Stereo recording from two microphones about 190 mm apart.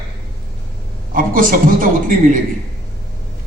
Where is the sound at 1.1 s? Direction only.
45° right (ahead or behind).